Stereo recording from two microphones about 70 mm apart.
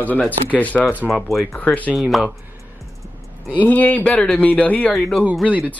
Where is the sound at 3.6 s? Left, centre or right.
Left.